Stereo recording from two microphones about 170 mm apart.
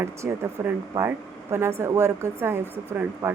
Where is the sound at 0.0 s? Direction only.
15° right (ahead or behind).